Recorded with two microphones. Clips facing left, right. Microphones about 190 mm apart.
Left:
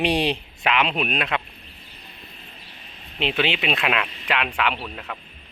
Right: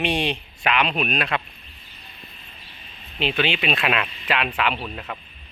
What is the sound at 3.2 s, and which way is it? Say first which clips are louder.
Speech: even; 20° left (ahead or behind).